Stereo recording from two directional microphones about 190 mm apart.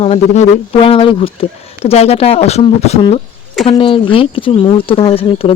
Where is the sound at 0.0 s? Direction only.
35° left (ahead or behind).